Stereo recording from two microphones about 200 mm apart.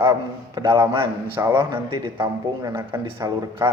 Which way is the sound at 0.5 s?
10° right (ahead or behind).